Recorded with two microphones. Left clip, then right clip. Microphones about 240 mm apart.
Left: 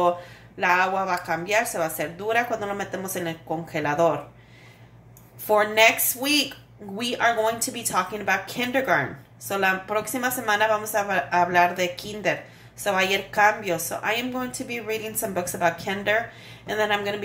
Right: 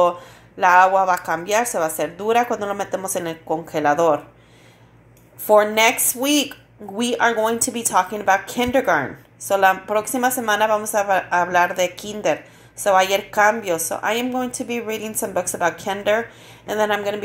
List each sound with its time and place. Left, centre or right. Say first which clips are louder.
0.6 s a woman's voice: right 8 dB; right
5.5 s a woman's voice: right 4 dB; right